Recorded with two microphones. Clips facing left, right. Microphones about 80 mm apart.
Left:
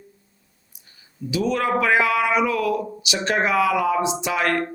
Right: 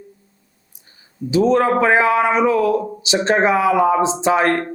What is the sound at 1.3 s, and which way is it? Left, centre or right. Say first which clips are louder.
A man's voice: right 7 dB; right.